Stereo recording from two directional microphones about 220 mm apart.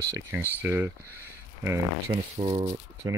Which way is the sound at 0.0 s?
10° right (ahead or behind).